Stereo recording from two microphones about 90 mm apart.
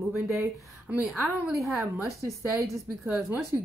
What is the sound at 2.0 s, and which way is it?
Speech, 35° right (ahead or behind).